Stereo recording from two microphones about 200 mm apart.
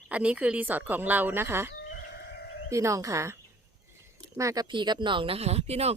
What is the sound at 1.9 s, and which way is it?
Chicken, 55° left (ahead or behind).